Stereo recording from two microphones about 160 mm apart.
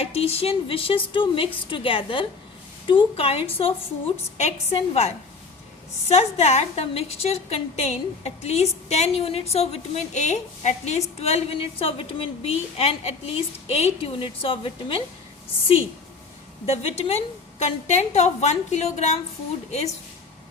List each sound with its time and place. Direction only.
0.0 s a woman's voice: 40° left (ahead or behind)
16.6 s a woman's voice: 40° left (ahead or behind)